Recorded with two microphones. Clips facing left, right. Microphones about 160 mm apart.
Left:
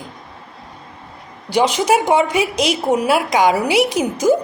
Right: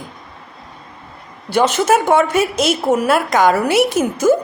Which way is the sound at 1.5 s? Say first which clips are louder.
Right 1 dB; 15° left (ahead or behind).